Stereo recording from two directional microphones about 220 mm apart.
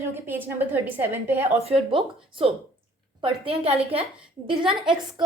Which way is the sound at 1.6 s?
25° right (ahead or behind).